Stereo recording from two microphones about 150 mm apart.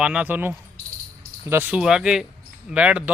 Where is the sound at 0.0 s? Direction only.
10° right (ahead or behind).